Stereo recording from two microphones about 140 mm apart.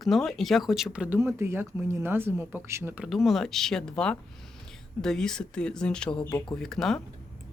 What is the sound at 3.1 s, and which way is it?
Speech, centre (ahead or behind).